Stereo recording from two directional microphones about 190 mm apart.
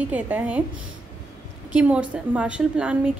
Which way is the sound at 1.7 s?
5° right (ahead or behind).